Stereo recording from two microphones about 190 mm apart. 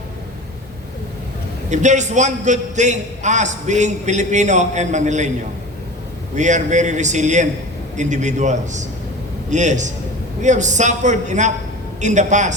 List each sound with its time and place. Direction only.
1.7 s a man's voice: 40° right (ahead or behind)
6.3 s a man's voice: 40° right (ahead or behind)